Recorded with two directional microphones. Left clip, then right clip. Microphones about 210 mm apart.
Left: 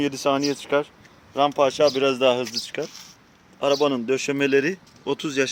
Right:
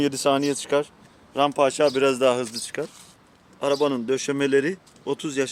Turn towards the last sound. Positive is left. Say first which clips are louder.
# left 2 dB
turn(degrees=0)  # may be behind; listen again after turning